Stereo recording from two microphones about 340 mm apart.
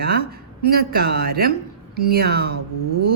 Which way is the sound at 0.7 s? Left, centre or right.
Right.